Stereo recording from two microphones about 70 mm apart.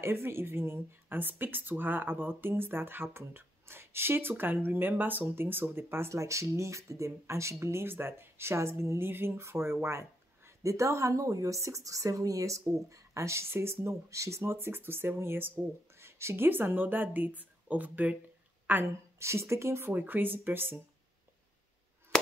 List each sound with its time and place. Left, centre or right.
0.0 s speech: right
6.1 s a woman's voice: right
19.1 s speech: right
19.9 s speech: right
22.1 s a sound: centre